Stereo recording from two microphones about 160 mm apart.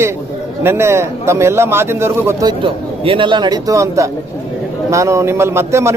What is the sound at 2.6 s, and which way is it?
A man's voice, 35° right (ahead or behind).